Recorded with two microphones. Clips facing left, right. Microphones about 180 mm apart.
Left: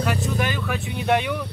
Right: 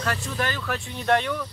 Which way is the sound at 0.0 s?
15° left (ahead or behind).